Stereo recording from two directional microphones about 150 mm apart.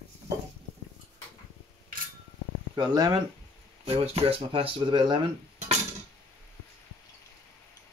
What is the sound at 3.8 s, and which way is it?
Speech, 40° right (ahead or behind).